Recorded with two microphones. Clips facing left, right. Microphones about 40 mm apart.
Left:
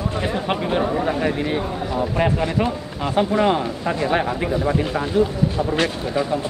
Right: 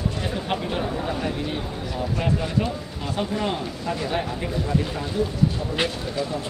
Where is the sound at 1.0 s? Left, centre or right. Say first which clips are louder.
Left 6 dB; left.